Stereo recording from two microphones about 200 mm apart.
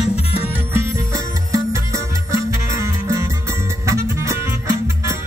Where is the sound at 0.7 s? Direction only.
15° right (ahead or behind).